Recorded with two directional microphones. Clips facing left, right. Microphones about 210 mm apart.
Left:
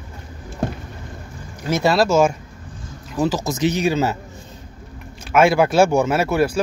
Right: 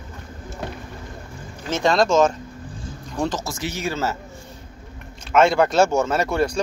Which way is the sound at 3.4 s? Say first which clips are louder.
Left 8 dB; 20° left (ahead or behind).